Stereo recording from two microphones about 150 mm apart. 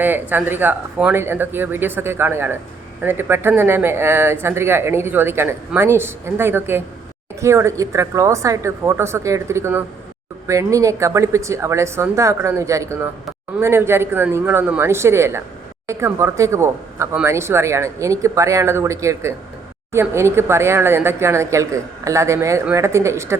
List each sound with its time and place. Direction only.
0.0 s speech: 15° right (ahead or behind)